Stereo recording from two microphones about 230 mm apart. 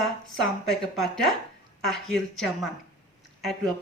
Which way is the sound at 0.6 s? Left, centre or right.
Centre.